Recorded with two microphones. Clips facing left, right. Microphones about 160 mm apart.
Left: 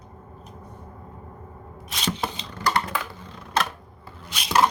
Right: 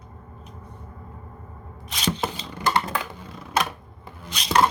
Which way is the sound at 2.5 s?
20° right (ahead or behind).